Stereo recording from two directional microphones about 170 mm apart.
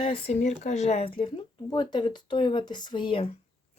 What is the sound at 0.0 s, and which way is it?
Speech, 35° left (ahead or behind).